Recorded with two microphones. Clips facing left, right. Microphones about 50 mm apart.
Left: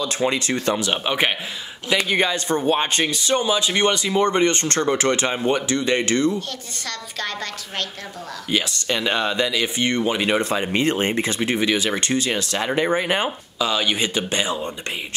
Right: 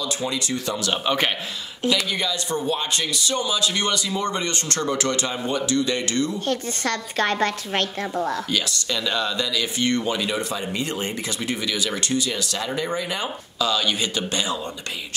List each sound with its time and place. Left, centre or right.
0.0 s speech: left
0.7 s speech: left
1.9 s speech: left
6.5 s speech: right
8.5 s speech: left
10.2 s speech: left
13.6 s speech: left